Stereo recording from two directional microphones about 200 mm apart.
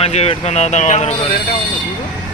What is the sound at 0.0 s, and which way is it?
Speech, 30° left (ahead or behind).